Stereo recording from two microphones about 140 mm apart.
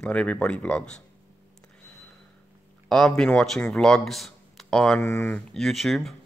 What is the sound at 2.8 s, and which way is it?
Speech, 5° left (ahead or behind).